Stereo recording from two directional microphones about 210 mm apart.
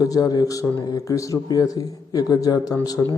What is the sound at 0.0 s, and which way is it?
Speech, 15° left (ahead or behind).